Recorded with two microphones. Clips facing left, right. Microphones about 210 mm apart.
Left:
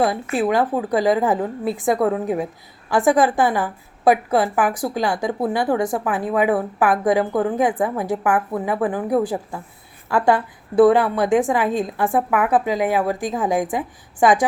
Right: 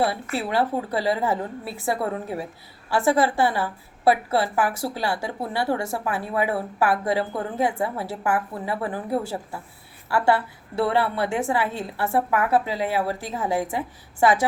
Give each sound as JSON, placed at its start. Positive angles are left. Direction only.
{"t": 0.1, "sound": "a woman's voice", "side_deg": 15}